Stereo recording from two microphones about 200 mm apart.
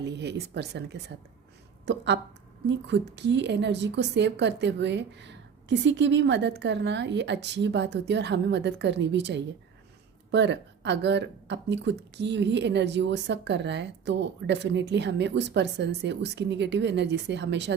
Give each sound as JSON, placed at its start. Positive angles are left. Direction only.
{"t": 0.0, "sound": "speech", "side_deg": -60}